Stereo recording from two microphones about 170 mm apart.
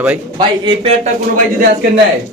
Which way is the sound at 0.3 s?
30° right (ahead or behind).